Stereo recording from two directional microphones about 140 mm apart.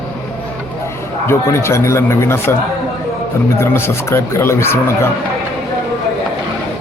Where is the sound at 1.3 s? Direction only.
20° left (ahead or behind).